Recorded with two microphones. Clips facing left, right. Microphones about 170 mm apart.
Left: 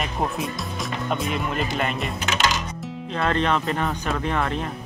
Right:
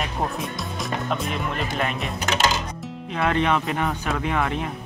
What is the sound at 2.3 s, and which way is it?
Music, 30° right (ahead or behind).